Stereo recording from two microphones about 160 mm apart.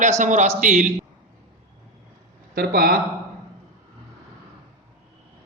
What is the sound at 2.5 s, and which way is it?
Speech, 70° right (ahead or behind).